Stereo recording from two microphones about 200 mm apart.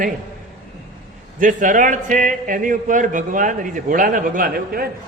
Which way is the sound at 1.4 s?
40° right (ahead or behind).